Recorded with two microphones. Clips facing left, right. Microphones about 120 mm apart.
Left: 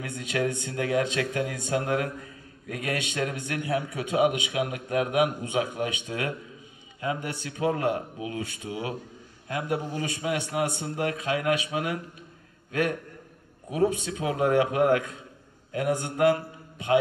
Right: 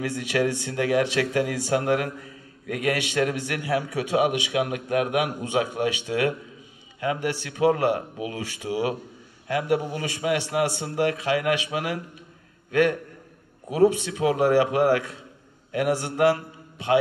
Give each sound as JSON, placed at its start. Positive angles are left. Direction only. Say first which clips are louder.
{"t": 0.0, "sound": "a man's voice", "louder": "right 4 dB", "side_deg": -80}
{"t": 2.7, "sound": "a man's voice", "louder": "right 6 dB", "side_deg": -85}
{"t": 13.7, "sound": "a man's voice", "louder": "right 5 dB", "side_deg": -75}